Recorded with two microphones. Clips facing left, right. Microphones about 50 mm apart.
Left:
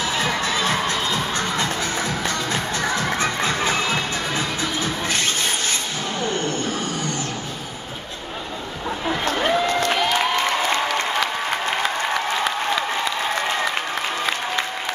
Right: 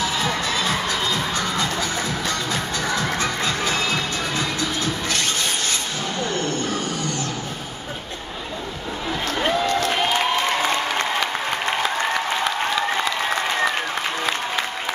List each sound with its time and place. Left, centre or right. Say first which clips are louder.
0.1 s music: left 1 dB; left
9.4 s music: even; centre